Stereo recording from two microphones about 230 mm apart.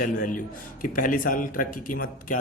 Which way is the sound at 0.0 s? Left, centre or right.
Left.